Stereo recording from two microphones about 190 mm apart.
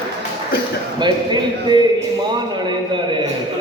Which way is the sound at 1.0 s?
25° right (ahead or behind).